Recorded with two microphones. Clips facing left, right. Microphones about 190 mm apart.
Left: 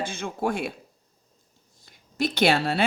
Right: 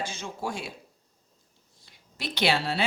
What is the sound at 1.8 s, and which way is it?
A woman's voice, 45° left (ahead or behind).